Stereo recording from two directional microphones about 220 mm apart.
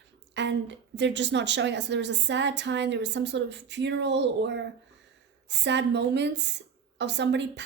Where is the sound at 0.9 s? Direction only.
55° right (ahead or behind).